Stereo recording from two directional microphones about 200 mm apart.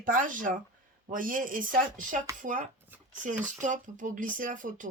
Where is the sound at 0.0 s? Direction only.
45° right (ahead or behind).